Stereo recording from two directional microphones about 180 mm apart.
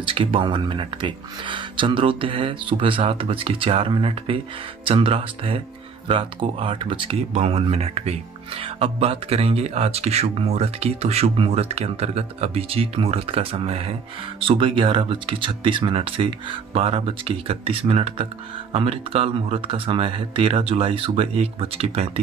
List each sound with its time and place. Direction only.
0.0 s speech: 30° right (ahead or behind)